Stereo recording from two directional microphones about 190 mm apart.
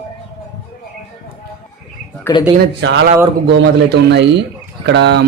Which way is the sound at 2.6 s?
65° right (ahead or behind).